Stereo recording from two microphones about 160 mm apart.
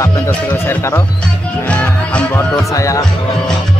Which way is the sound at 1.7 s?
10° left (ahead or behind).